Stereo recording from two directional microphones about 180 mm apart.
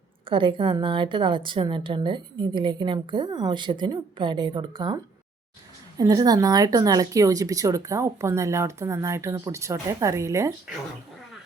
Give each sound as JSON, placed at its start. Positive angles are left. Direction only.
{"t": 0.3, "sound": "a woman's voice", "side_deg": -30}
{"t": 6.0, "sound": "speech", "side_deg": -20}